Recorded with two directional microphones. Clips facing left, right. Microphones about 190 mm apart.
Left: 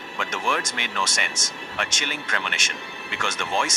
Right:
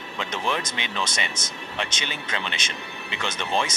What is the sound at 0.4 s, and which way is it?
Speech, 20° right (ahead or behind).